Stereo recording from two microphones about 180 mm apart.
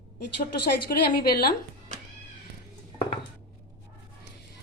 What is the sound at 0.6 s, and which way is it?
Speech, 60° left (ahead or behind).